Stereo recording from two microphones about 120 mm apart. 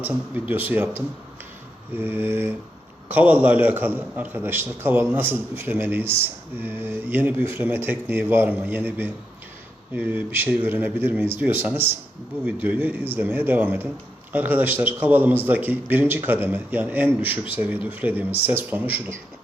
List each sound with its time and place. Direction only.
0.0 s speech: 15° right (ahead or behind)